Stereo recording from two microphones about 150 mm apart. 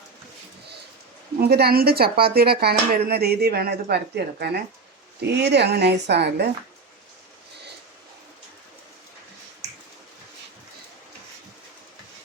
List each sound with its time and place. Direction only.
1.4 s speech: 90° right